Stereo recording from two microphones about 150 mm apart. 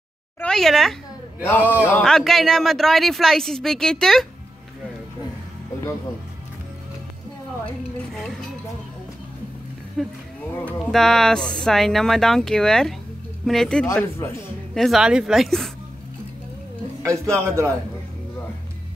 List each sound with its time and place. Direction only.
0.4 s speech: 5° left (ahead or behind)
1.6 s speech: 10° right (ahead or behind)
1.9 s speech: 10° left (ahead or behind)
8.1 s a sound: centre (ahead or behind)
10.0 s speech: centre (ahead or behind)
14.1 s speech: 20° left (ahead or behind)
14.7 s speech: centre (ahead or behind)
17.0 s a man's voice: 20° right (ahead or behind)